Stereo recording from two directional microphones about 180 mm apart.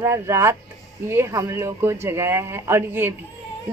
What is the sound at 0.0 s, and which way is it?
Speech, 15° right (ahead or behind).